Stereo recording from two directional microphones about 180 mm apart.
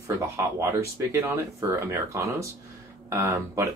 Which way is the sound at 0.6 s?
15° right (ahead or behind).